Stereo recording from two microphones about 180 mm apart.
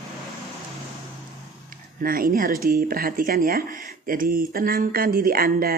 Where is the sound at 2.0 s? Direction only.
50° right (ahead or behind).